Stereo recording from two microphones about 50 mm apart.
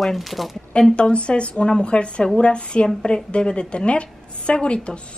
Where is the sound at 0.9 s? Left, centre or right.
Left.